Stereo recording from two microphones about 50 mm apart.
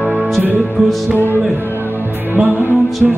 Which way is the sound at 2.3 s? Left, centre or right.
Right.